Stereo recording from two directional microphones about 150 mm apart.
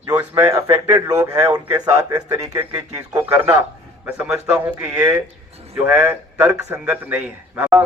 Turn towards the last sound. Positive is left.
turn(degrees=-10)  # may be behind; listen again after turning